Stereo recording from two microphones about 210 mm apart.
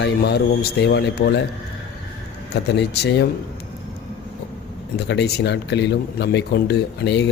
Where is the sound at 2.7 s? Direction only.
50° left (ahead or behind).